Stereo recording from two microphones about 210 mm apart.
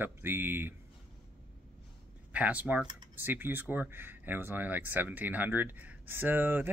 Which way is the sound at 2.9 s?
20° right (ahead or behind).